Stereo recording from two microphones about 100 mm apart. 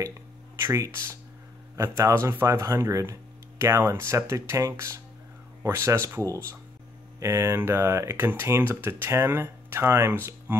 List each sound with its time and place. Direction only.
0.6 s speech: 30° right (ahead or behind)